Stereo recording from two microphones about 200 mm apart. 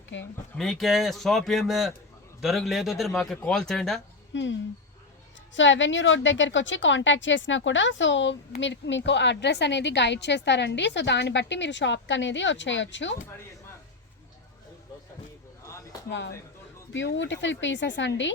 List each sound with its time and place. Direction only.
0.1 s speech: 65° left (ahead or behind)
0.5 s speech: centre (ahead or behind)
4.3 s a woman's voice: 65° left (ahead or behind)
5.5 s a woman's voice: 65° left (ahead or behind)
15.6 s a sound: 15° left (ahead or behind)
16.0 s a woman's voice: 65° left (ahead or behind)